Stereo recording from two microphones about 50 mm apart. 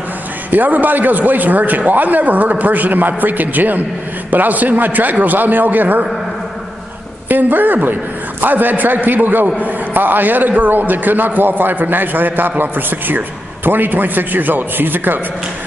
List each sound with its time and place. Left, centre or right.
0.5 s a man's voice: right
7.2 s a man's voice: right